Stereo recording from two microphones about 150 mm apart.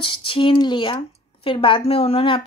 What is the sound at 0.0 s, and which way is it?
Speech, 35° left (ahead or behind).